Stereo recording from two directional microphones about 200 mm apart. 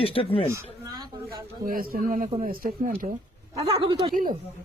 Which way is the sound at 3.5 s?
25° right (ahead or behind).